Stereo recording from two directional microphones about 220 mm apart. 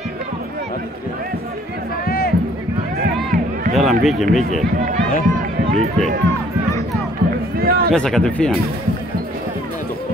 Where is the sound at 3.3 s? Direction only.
35° right (ahead or behind).